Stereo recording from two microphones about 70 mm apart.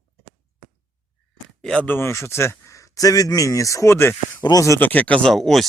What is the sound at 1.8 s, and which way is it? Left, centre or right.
Speech, left.